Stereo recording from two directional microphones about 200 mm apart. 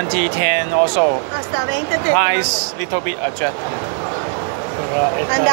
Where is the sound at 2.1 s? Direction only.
60° right (ahead or behind).